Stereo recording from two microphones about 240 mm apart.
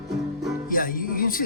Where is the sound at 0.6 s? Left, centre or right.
Left.